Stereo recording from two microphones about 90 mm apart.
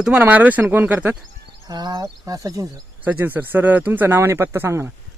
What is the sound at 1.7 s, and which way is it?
Speech, 50° right (ahead or behind).